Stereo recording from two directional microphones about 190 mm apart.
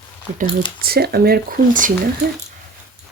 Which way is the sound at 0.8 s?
55° right (ahead or behind).